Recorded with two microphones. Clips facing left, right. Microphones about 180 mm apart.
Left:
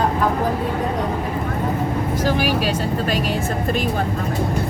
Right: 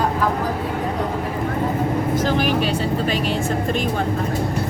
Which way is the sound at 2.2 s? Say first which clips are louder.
Left 2 dB; 5° left (ahead or behind).